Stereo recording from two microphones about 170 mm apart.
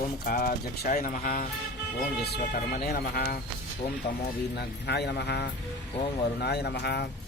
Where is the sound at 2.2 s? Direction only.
65° left (ahead or behind).